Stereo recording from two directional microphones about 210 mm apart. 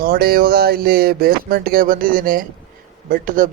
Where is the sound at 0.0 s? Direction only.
45° right (ahead or behind).